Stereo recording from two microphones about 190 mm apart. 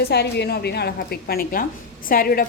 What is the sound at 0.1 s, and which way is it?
A woman's voice, 60° left (ahead or behind).